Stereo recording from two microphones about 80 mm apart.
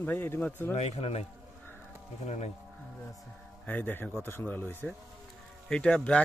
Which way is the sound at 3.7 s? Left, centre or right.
Left.